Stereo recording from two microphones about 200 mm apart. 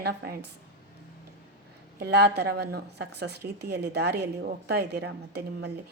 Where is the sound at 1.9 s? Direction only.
55° right (ahead or behind).